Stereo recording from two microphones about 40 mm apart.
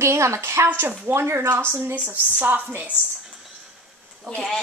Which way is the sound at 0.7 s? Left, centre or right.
Right.